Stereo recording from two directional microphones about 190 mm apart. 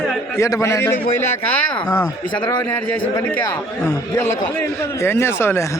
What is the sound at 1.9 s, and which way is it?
Speech, 5° left (ahead or behind).